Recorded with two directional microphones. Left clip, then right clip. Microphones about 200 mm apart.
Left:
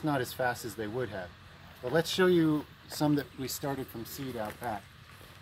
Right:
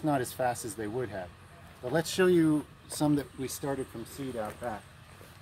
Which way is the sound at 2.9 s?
5° right (ahead or behind).